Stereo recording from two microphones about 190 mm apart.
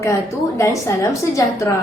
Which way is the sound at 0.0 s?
15° left (ahead or behind).